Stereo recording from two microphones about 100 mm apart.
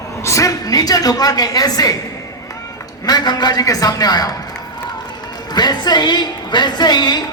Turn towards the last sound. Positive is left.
turn(degrees=45)  # may be behind; listen again after turning